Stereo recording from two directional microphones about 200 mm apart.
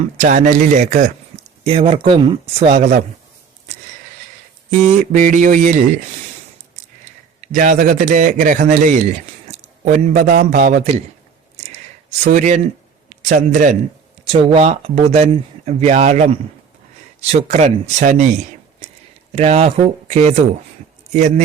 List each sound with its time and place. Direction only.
0.0 s speech: 40° right (ahead or behind)
5.1 s speech: 40° right (ahead or behind)
7.4 s speech: 40° right (ahead or behind)
12.2 s a man's voice: 35° right (ahead or behind)
14.3 s speech: 30° right (ahead or behind)
19.3 s speech: 30° right (ahead or behind)